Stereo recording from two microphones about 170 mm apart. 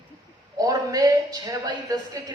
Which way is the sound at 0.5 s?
20° right (ahead or behind).